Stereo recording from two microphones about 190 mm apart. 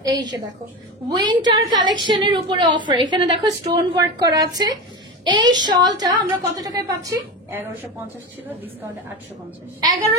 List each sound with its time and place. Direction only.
0.0 s a woman's voice: 20° right (ahead or behind)